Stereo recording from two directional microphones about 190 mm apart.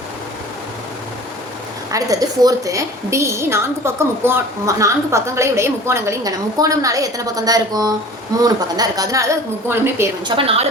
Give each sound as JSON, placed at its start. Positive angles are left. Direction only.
{"t": 1.9, "sound": "a woman's voice", "side_deg": -20}
{"t": 10.2, "sound": "a woman's voice", "side_deg": -30}